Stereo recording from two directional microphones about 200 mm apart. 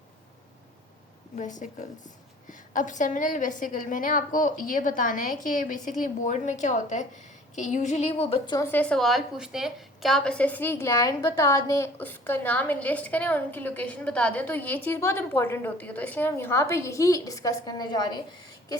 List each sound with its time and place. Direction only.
1.4 s a woman's voice: 40° left (ahead or behind)
8.5 s a woman's voice: 10° left (ahead or behind)